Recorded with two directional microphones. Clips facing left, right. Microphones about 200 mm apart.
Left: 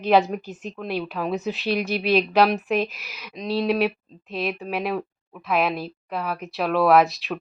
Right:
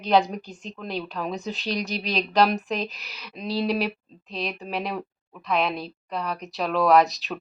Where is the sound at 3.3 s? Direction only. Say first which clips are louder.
Left 3 dB; 5° right (ahead or behind).